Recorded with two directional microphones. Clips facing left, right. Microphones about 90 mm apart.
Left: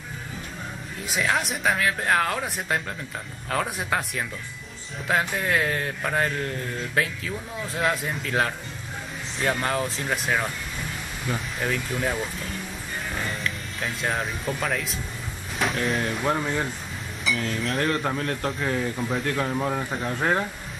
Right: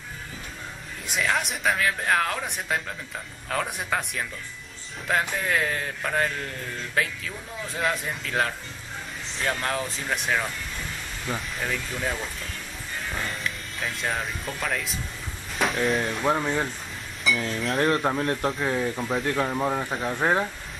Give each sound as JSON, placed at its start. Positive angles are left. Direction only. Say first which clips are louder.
{"t": 1.0, "sound": "speech", "louder": "left 1 dB", "side_deg": 0}
{"t": 18.1, "sound": "speech", "louder": "right 2 dB", "side_deg": -20}
{"t": 18.4, "sound": "speech", "louder": "right 1 dB", "side_deg": -5}